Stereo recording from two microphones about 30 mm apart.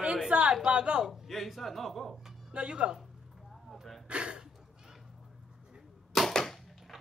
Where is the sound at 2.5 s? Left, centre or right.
Right.